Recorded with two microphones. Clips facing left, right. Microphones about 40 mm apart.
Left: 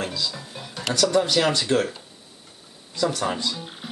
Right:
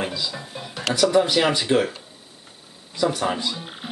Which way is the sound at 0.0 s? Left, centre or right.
Centre.